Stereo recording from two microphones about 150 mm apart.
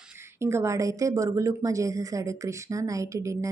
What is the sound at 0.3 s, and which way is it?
A woman's voice, 20° right (ahead or behind).